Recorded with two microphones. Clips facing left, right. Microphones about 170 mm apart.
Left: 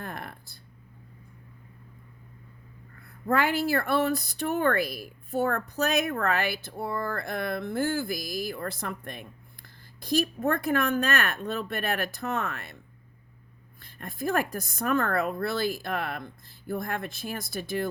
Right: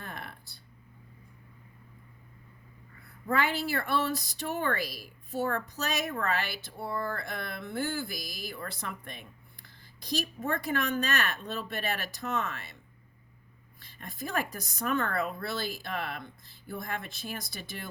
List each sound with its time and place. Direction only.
0.0 s a sound: 50° left (ahead or behind)
3.2 s speech: 50° left (ahead or behind)
13.7 s speech: 55° left (ahead or behind)